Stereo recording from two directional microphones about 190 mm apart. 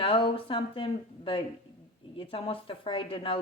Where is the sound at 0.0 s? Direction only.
30° left (ahead or behind).